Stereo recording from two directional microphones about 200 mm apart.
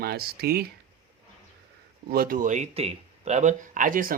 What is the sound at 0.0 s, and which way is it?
Speech, 50° right (ahead or behind).